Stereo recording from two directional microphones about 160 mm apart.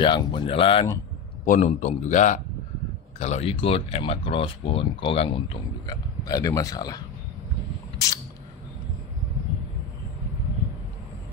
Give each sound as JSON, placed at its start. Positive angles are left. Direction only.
{"t": 0.0, "sound": "speech", "side_deg": 30}
{"t": 1.4, "sound": "a man's voice", "side_deg": 55}
{"t": 5.9, "sound": "speech", "side_deg": 25}